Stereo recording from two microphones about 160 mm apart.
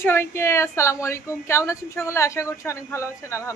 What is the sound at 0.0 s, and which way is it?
Speech, 15° left (ahead or behind).